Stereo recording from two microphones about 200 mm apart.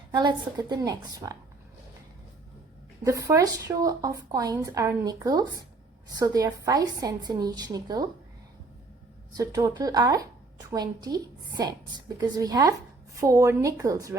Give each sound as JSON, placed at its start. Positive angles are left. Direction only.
{"t": 0.1, "sound": "a woman's voice", "side_deg": -20}
{"t": 3.0, "sound": "a woman's voice", "side_deg": -15}
{"t": 9.3, "sound": "a woman's voice", "side_deg": -15}